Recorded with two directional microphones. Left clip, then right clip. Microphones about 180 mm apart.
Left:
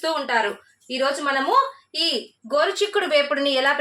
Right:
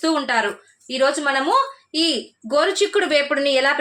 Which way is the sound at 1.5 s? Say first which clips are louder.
Right 1 dB; 70° right (ahead or behind).